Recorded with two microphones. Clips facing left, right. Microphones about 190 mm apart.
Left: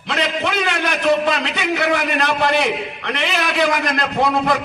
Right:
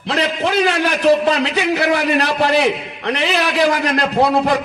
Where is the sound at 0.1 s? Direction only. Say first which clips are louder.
Right 3 dB; 35° right (ahead or behind).